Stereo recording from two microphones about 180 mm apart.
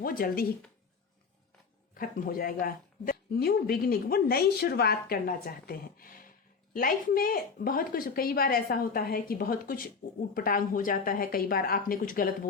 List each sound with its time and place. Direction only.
0.0 s speech: 55° left (ahead or behind)
2.0 s a woman's voice: 50° left (ahead or behind)